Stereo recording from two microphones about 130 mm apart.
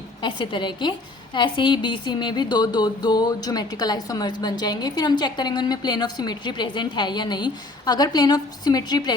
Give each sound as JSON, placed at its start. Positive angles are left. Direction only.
{"t": 0.2, "sound": "a woman's voice", "side_deg": 35}